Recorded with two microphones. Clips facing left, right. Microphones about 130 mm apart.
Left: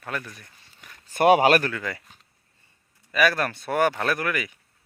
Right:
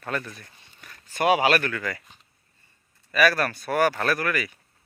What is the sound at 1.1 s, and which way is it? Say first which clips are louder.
Speech: left 4 dB; 45° left (ahead or behind).